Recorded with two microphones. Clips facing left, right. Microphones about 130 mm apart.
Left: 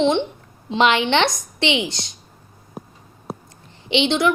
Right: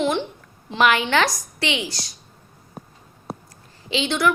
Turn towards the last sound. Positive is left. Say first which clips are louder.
# left 3 dB
turn(degrees=25)  # may be behind; listen again after turning